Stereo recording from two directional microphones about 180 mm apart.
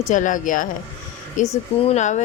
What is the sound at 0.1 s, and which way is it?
A woman's voice, 45° left (ahead or behind).